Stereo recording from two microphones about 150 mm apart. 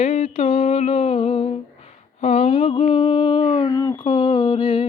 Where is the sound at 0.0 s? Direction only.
45° left (ahead or behind).